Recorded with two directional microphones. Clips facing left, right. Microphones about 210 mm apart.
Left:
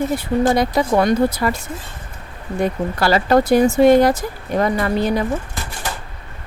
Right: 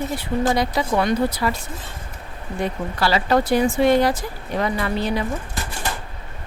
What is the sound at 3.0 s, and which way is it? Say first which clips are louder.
Speech: left 4 dB; 45° left (ahead or behind).